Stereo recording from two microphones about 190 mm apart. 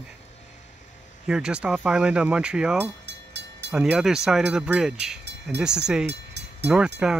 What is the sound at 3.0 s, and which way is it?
Train, 65° right (ahead or behind).